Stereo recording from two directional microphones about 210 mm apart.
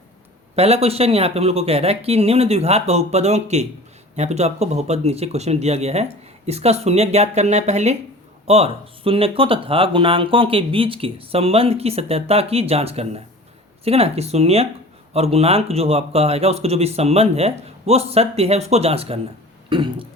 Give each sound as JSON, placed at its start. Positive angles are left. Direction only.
{"t": 0.5, "sound": "speech", "side_deg": -30}